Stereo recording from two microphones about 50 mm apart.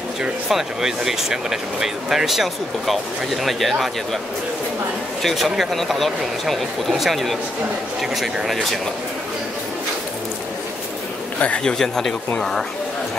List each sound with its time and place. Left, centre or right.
0.5 s speech: centre
5.2 s speech: centre
11.3 s a man's voice: left
11.6 s speech: centre